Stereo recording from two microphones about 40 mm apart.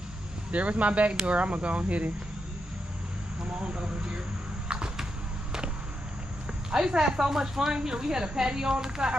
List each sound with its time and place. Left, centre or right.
0.5 s speech: right
3.5 s speech: right
6.7 s speech: centre